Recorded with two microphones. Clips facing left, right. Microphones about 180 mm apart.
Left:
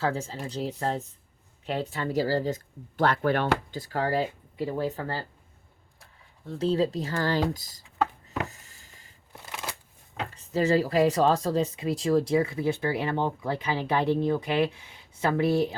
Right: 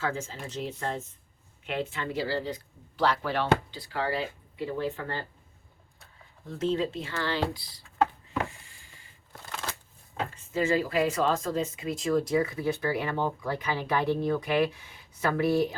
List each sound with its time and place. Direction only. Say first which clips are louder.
0.0 s speech: left 3 dB; 35° left (ahead or behind)
6.6 s speech: left 3 dB; 35° left (ahead or behind)
8.4 s a sound: even; 40° left (ahead or behind)
9.3 s shuffling cards: even; 10° left (ahead or behind)
10.3 s speech: left 3 dB; 35° left (ahead or behind)